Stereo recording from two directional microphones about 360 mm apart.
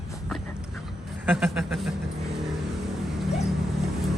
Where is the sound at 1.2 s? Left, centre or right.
Centre.